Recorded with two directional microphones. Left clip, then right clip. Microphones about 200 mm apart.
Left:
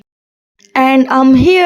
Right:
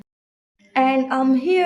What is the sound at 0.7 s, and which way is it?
Speech, 50° left (ahead or behind).